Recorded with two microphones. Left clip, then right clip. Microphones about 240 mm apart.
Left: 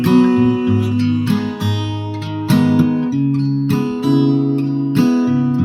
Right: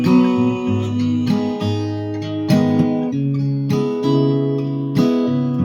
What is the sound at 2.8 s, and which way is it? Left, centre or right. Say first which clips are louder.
Music: left 2 dB; left.